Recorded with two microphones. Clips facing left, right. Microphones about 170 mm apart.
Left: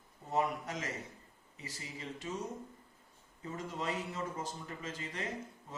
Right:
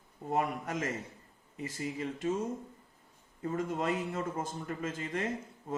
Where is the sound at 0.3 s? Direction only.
55° right (ahead or behind).